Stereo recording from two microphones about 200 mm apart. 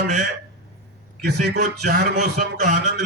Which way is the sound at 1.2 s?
55° right (ahead or behind).